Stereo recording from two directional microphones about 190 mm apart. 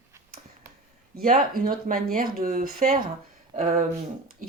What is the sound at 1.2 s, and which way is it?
A woman's voice, 50° right (ahead or behind).